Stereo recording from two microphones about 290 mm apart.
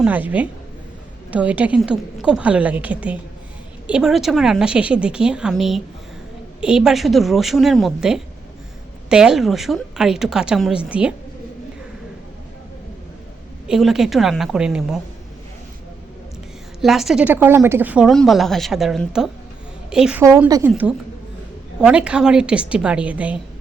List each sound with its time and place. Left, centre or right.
0.0 s a woman's voice: centre
13.7 s a woman's voice: centre
16.8 s a woman's voice: centre